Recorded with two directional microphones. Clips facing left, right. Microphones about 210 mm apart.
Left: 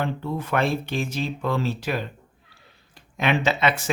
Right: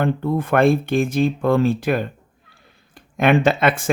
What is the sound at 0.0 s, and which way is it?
Speech, 50° right (ahead or behind).